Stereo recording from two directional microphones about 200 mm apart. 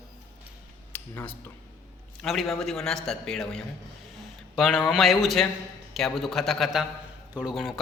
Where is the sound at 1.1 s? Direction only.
5° left (ahead or behind).